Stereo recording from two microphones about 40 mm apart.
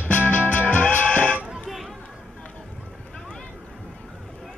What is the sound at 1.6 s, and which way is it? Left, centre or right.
Chatter, centre.